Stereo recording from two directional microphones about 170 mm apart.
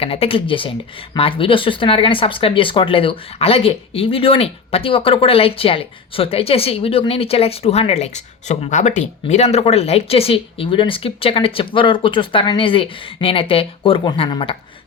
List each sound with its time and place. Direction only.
0.0 s speech: 35° left (ahead or behind)